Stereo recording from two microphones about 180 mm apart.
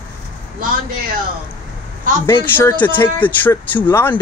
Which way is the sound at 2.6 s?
10° left (ahead or behind).